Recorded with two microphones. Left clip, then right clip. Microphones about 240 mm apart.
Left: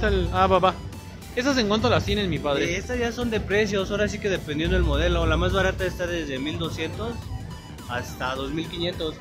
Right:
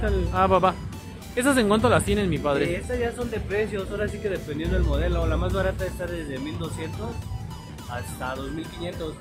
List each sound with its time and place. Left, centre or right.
0.2 s speech: centre
2.7 s speech: left
7.9 s speech: left